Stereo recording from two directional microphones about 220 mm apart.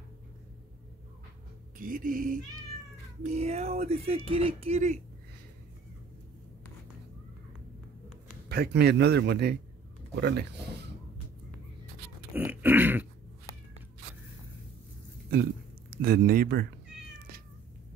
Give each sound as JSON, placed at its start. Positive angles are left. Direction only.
{"t": 1.8, "sound": "speech", "side_deg": -40}
{"t": 8.5, "sound": "a man's voice", "side_deg": -45}
{"t": 12.4, "sound": "a sound", "side_deg": -10}
{"t": 15.9, "sound": "a man's voice", "side_deg": -45}